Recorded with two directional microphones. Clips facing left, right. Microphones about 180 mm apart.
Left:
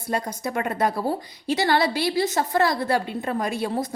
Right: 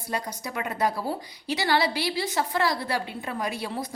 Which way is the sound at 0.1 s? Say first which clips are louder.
Left 5 dB; 50° left (ahead or behind).